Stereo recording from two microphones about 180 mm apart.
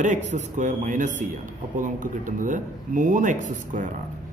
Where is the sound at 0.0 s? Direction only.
45° right (ahead or behind).